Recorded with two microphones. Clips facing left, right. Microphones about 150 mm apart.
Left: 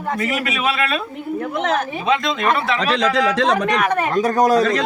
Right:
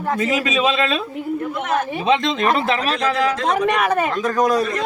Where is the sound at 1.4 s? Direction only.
80° left.